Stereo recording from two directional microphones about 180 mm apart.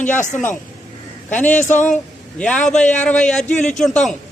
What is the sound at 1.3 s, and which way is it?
Speech, 10° left (ahead or behind).